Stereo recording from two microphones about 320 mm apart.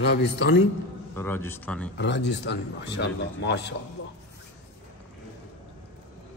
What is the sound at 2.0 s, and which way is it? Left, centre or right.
A man's voice, left.